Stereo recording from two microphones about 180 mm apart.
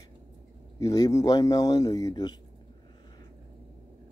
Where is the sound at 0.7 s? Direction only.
20° left (ahead or behind).